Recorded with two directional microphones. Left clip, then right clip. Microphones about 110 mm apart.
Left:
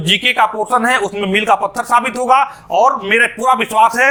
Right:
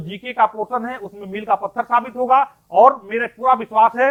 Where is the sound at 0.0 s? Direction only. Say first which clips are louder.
Left 6 dB; 15° left (ahead or behind).